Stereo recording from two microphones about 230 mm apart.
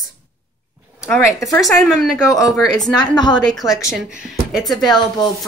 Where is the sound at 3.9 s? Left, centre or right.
Centre.